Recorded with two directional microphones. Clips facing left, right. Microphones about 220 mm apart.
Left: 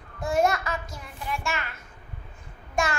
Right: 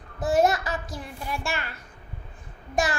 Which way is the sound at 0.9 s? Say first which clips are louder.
Right 1 dB; 35° right (ahead or behind).